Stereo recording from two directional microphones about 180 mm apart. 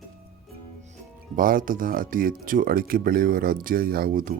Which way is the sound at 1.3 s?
50° right (ahead or behind).